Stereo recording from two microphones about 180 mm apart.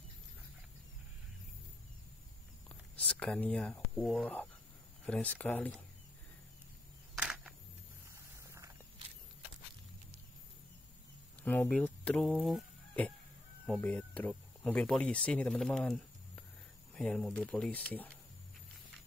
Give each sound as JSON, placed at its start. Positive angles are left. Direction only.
{"t": 2.7, "sound": "speech", "side_deg": 5}
{"t": 7.2, "sound": "a sound", "side_deg": -5}
{"t": 11.7, "sound": "speech", "side_deg": 5}